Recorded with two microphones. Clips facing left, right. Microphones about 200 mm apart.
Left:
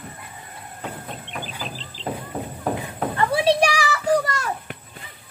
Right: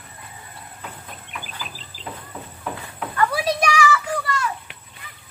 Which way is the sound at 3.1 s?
25° left (ahead or behind).